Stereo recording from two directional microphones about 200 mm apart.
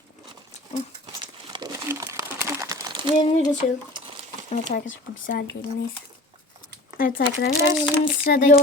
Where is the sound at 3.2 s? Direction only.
30° left (ahead or behind).